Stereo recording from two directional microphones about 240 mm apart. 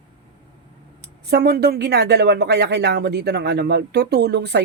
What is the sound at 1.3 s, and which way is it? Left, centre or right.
Speech, right.